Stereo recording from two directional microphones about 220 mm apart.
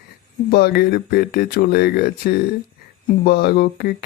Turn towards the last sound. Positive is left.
turn(degrees=45)  # may be behind; listen again after turning